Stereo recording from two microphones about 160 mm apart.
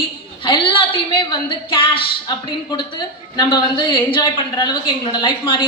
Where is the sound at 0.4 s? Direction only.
30° left (ahead or behind).